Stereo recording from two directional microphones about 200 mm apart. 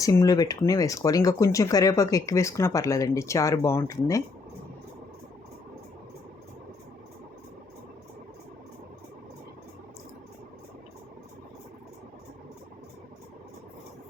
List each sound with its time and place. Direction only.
0.0 s speech: 15° left (ahead or behind)